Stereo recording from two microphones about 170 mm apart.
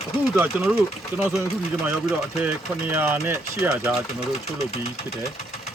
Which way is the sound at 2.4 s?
10° right (ahead or behind).